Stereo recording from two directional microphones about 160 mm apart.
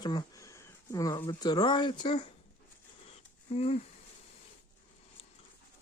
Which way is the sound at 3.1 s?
40° left (ahead or behind).